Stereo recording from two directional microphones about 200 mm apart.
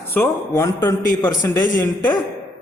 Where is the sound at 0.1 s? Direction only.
10° left (ahead or behind).